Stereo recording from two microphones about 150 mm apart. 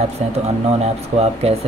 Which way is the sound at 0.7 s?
45° right (ahead or behind).